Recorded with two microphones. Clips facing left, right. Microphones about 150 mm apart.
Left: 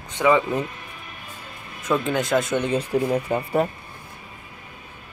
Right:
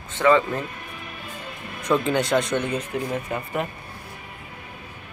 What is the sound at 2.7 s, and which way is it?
Speech, 35° left (ahead or behind).